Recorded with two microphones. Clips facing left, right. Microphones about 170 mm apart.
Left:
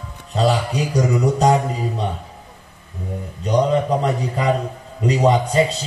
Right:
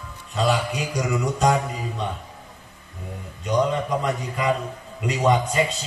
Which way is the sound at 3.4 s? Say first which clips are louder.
Left 5 dB; 35° left (ahead or behind).